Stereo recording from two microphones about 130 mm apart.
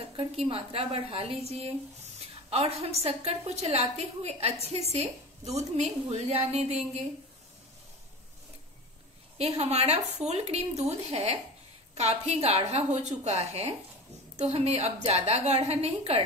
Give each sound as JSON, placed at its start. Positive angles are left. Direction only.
{"t": 0.1, "sound": "a woman's voice", "side_deg": -45}
{"t": 9.4, "sound": "a woman's voice", "side_deg": -55}